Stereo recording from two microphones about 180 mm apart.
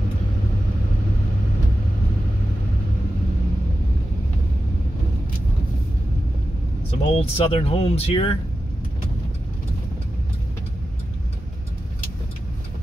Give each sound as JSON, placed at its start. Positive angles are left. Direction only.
{"t": 6.9, "sound": "speech", "side_deg": 30}